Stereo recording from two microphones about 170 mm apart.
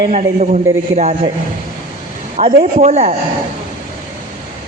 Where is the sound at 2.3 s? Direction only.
40° right (ahead or behind).